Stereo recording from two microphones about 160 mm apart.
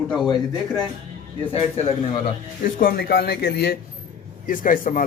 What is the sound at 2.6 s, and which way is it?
Speech, 65° left (ahead or behind).